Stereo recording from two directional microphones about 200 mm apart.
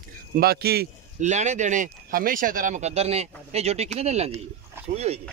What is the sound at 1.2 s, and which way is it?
Speech, 35° right (ahead or behind).